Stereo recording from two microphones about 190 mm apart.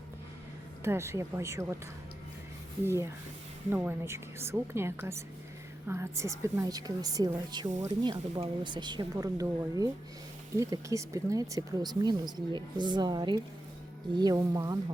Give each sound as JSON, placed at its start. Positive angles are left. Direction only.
{"t": 0.9, "sound": "a woman's voice", "side_deg": -15}
{"t": 2.8, "sound": "a woman's voice", "side_deg": -15}